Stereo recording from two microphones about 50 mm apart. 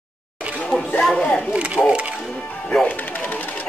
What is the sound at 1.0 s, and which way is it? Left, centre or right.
Speech, centre.